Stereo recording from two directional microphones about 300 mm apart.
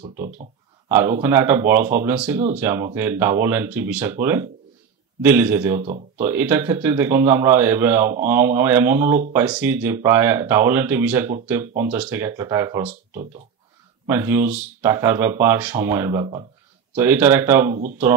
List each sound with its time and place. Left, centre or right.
0.8 s speech: centre
14.0 s speech: centre